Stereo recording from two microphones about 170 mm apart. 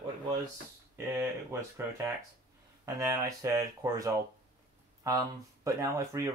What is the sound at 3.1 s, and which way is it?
Speech, 20° right (ahead or behind).